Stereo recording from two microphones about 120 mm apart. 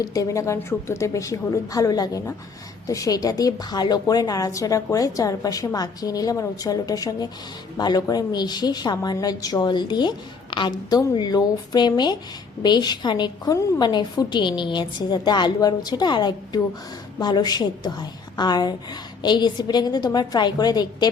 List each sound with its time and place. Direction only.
0.0 s a woman's voice: 30° left (ahead or behind)